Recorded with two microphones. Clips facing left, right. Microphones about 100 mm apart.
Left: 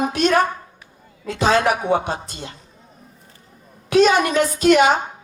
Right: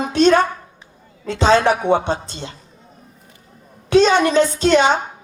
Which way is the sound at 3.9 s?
30° right (ahead or behind).